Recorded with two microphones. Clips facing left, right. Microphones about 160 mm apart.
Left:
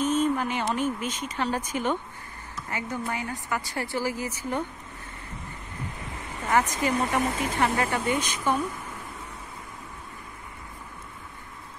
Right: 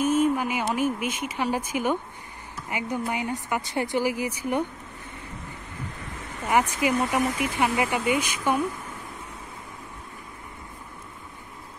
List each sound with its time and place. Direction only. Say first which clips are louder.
0.0 s speech: right 2 dB; 10° right (ahead or behind)
6.4 s speech: right 1 dB; 10° right (ahead or behind)